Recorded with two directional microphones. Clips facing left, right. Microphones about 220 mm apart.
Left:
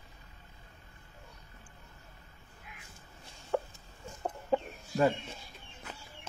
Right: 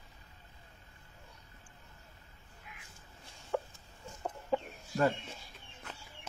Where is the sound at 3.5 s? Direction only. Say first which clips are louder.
Left 3 dB; 50° left (ahead or behind).